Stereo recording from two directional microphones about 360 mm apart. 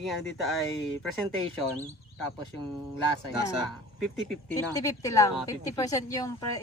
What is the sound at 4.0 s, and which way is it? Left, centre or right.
Speech, centre.